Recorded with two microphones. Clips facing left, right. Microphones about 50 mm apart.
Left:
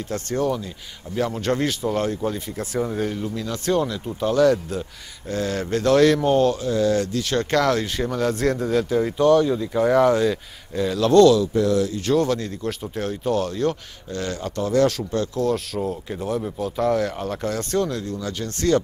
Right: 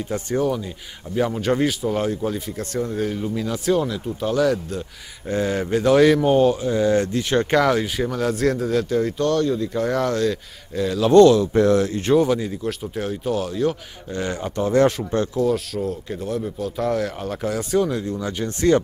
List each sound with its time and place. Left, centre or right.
0.1 s speech: centre
2.6 s speech: centre
5.3 s speech: centre
11.1 s speech: right
11.5 s speech: right
12.1 s speech: centre
14.1 s speech: centre
15.3 s speech: centre; by 18.8 s right